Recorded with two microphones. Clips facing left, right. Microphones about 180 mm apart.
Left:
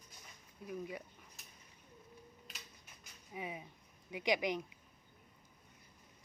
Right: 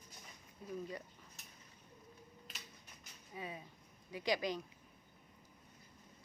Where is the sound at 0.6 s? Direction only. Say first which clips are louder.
Left 1 dB; 10° left (ahead or behind).